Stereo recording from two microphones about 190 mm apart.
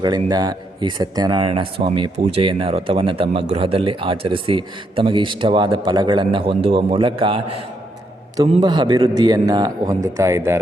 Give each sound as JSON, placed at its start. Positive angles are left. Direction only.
{"t": 0.0, "sound": "speech", "side_deg": -20}